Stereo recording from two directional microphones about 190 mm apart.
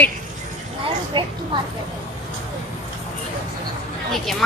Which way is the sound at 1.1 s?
25° right (ahead or behind).